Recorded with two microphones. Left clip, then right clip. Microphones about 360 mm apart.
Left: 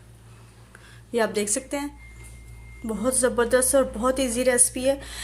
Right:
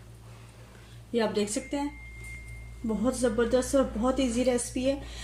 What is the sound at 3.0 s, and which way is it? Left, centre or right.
A woman's voice, left.